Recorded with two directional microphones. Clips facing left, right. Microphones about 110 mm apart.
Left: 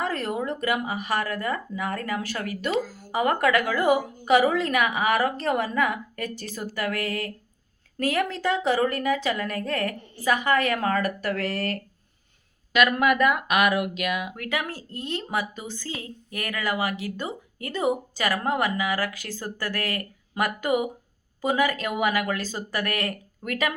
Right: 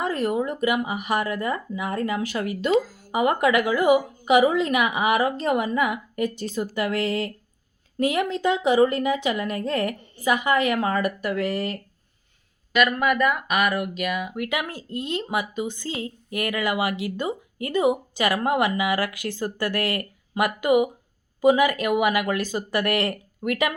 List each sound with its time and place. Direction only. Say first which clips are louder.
0.0 s a woman's voice: right 4 dB; 15° right (ahead or behind)
14.3 s speech: right 2 dB; 15° right (ahead or behind)